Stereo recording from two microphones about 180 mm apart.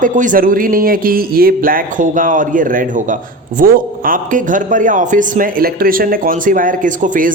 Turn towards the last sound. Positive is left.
turn(degrees=-45)  # may be behind; listen again after turning